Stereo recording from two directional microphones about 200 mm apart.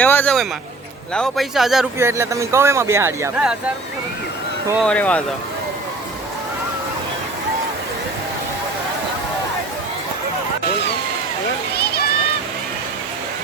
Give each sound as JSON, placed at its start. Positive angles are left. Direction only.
{"t": 0.0, "sound": "speech", "side_deg": 10}
{"t": 2.0, "sound": "speech", "side_deg": -15}
{"t": 4.8, "sound": "speech", "side_deg": 5}
{"t": 11.7, "sound": "a sound", "side_deg": 50}